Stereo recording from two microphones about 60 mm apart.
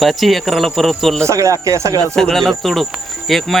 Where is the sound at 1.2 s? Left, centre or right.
Right.